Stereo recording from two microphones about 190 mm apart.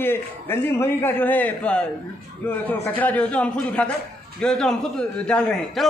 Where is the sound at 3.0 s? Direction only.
5° left (ahead or behind).